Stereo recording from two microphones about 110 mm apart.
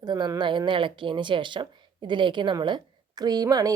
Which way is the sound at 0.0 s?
40° right (ahead or behind).